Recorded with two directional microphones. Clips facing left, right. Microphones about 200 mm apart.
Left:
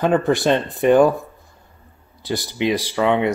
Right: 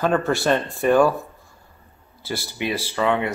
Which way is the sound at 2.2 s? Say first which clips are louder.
Left 6 dB; 15° left (ahead or behind).